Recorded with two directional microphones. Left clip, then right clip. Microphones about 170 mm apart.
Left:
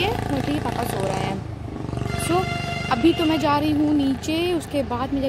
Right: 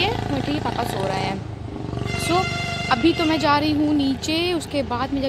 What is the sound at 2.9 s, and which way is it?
Speech, 5° left (ahead or behind).